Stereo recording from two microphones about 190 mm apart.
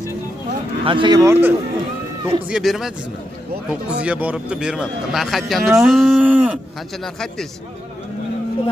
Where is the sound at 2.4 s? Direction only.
Centre (ahead or behind).